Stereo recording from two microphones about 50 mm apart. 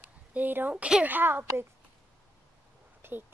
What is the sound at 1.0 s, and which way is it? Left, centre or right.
Speech, right.